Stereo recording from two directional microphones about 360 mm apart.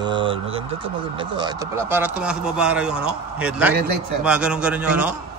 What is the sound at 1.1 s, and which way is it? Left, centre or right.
Speech, centre.